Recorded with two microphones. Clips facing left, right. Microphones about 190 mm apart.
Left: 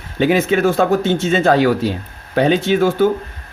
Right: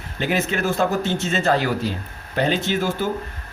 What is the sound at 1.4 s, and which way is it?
A man's voice, 75° left (ahead or behind).